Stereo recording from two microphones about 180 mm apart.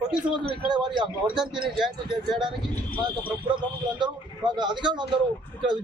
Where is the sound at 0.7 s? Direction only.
25° right (ahead or behind).